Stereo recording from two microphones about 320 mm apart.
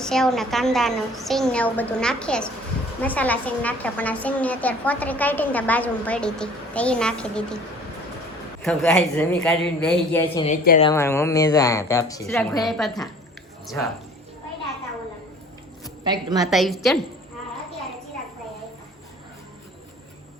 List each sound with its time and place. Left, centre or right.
0.0 s a woman's voice: centre
8.6 s a woman's voice: centre
10.2 s speech: centre
10.9 s a woman's voice: centre
16.0 s a woman's voice: centre
16.4 s a woman's voice: centre